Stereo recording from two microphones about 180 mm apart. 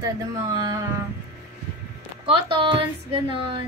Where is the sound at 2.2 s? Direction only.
30° right (ahead or behind).